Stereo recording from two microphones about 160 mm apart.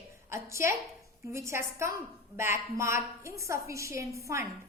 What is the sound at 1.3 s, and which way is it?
A woman's voice, 15° right (ahead or behind).